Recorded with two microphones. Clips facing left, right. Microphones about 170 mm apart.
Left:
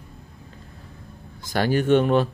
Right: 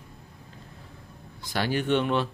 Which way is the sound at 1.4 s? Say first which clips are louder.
Left 6 dB; 45° left (ahead or behind).